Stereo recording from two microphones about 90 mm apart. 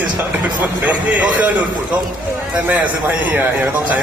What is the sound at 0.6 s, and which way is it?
Speech, 15° right (ahead or behind).